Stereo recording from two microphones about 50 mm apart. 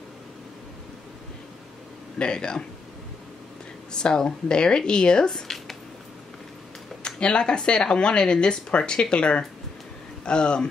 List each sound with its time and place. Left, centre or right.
2.1 s a woman's voice: centre
3.9 s a woman's voice: centre
5.3 s a sound: centre
7.0 s speech: centre